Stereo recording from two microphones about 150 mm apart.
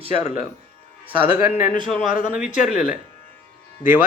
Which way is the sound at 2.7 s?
60° left (ahead or behind).